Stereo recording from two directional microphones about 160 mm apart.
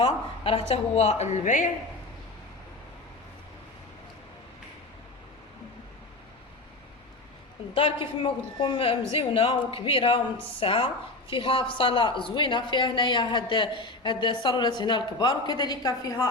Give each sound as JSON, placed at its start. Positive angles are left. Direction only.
{"t": 0.0, "sound": "a man's voice", "side_deg": 35}
{"t": 7.7, "sound": "a man's voice", "side_deg": 35}